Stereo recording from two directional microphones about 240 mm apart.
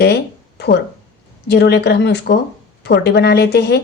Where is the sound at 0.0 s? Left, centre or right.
Left.